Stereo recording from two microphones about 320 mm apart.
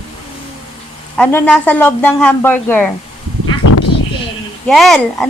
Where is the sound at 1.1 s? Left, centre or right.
Centre.